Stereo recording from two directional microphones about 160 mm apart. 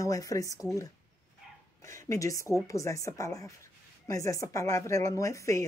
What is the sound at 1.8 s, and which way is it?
A woman's voice, 20° left (ahead or behind).